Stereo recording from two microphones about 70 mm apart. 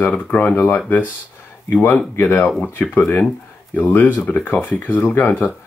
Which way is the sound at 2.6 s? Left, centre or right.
Left.